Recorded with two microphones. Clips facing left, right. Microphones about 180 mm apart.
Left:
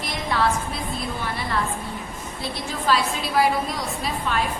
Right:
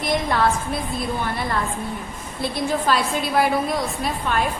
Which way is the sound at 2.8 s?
50° right (ahead or behind).